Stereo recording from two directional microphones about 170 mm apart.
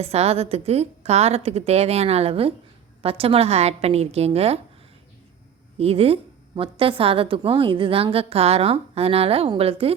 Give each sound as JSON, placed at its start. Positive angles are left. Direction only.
{"t": 0.0, "sound": "a woman's voice", "side_deg": -35}
{"t": 5.7, "sound": "a woman's voice", "side_deg": -35}